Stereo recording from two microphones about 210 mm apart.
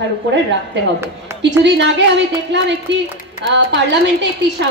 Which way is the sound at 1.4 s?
55° right (ahead or behind).